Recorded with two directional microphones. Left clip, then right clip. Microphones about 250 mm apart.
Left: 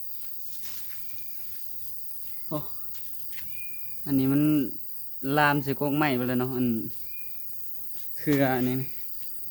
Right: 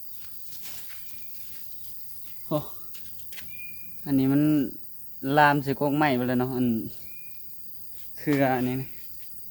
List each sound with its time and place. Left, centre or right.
2.5 s speech: right
4.0 s cricket: centre
5.2 s speech: centre
8.1 s speech: centre